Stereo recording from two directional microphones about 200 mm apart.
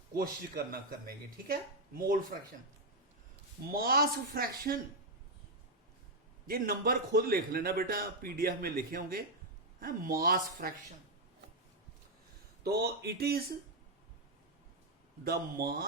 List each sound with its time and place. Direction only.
0.1 s a man's voice: 45° right (ahead or behind)
3.7 s a man's voice: 50° right (ahead or behind)
6.5 s a man's voice: 50° right (ahead or behind)
12.6 s a man's voice: 55° right (ahead or behind)
15.2 s a man's voice: 50° right (ahead or behind)